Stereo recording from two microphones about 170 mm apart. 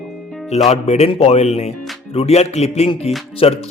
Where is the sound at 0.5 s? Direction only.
40° left (ahead or behind).